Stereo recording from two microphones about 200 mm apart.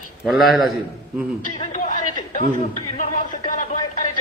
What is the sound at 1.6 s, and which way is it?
Speech, 35° left (ahead or behind).